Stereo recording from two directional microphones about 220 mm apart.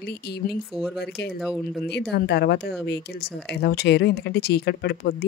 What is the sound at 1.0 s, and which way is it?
Speech, 50° left (ahead or behind).